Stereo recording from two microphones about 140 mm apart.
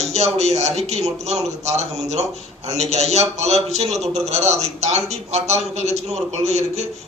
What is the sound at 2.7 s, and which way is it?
A man's voice, 50° right (ahead or behind).